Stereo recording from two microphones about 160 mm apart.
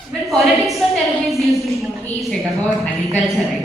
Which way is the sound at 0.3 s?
Centre (ahead or behind).